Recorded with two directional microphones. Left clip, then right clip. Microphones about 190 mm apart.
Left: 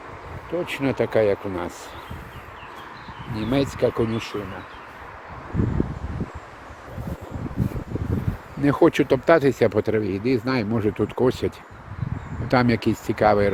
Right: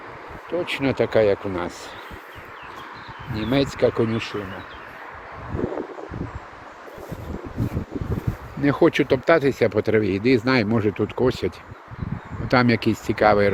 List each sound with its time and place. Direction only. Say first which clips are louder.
0.6 s speech: right 2 dB; centre (ahead or behind)
3.3 s speech: right 1 dB; 5° right (ahead or behind)
8.6 s speech: even; 15° left (ahead or behind)
9.9 s speech: right 4 dB; 5° right (ahead or behind)
10.8 s speech: even; 10° left (ahead or behind)